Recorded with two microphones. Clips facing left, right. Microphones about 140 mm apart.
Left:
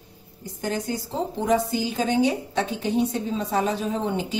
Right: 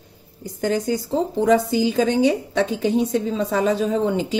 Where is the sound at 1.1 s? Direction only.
90° right.